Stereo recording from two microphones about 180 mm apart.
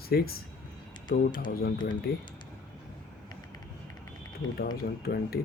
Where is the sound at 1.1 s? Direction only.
25° left (ahead or behind).